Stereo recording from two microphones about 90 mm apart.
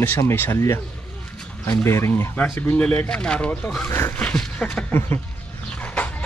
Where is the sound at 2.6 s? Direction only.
15° left (ahead or behind).